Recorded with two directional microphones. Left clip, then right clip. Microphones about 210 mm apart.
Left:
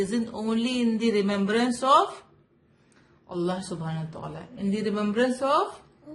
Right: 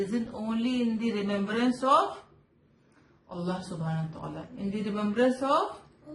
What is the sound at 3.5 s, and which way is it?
Speech, 35° left (ahead or behind).